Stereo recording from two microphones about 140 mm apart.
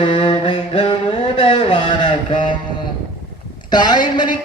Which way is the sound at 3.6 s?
30° left (ahead or behind).